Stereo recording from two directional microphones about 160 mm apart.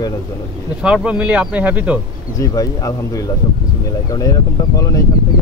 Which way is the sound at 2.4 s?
20° left (ahead or behind).